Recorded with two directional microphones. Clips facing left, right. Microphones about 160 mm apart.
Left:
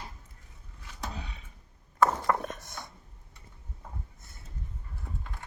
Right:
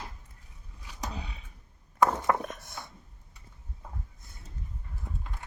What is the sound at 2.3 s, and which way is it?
Wood, 5° right (ahead or behind).